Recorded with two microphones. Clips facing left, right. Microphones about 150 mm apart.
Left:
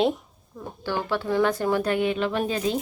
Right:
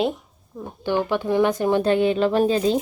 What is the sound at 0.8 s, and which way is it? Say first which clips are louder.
A woman's voice: right 5 dB; 20° right (ahead or behind).